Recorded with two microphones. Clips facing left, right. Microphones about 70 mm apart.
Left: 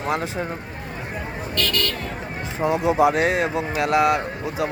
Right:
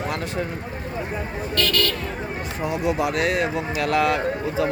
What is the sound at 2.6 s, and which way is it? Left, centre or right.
Speech, left.